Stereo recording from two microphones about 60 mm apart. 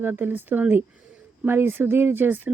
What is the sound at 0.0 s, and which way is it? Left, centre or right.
Speech, right.